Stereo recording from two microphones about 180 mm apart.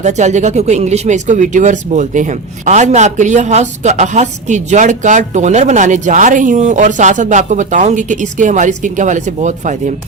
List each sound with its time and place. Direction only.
0.0 s speech: 40° right (ahead or behind)